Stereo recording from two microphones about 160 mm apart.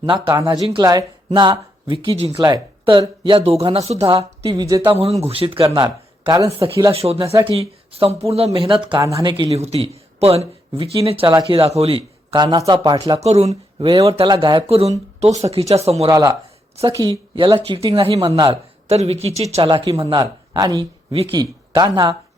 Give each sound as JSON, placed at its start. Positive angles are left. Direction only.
{"t": 0.0, "sound": "speech", "side_deg": -25}
{"t": 4.6, "sound": "speech", "side_deg": -20}
{"t": 4.9, "sound": "speech", "side_deg": -40}
{"t": 6.9, "sound": "speech", "side_deg": -40}
{"t": 9.0, "sound": "speech", "side_deg": -20}
{"t": 9.3, "sound": "speech", "side_deg": -35}
{"t": 13.1, "sound": "speech", "side_deg": -40}
{"t": 16.0, "sound": "speech", "side_deg": -25}